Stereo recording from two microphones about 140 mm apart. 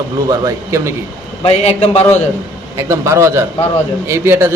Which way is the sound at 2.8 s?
20° right (ahead or behind).